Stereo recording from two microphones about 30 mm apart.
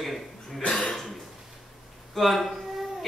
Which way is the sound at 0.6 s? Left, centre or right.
Left.